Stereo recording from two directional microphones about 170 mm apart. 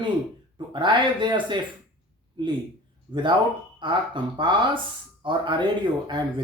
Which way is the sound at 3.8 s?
30° right (ahead or behind).